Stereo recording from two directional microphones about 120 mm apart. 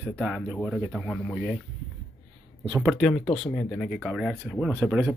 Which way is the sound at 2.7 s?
5° left (ahead or behind).